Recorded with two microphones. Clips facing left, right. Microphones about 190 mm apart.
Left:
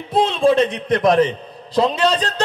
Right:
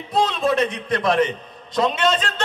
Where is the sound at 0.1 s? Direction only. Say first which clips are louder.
Left 5 dB; 25° left (ahead or behind).